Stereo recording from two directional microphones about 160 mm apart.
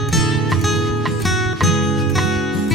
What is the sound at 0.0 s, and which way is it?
Music, centre (ahead or behind).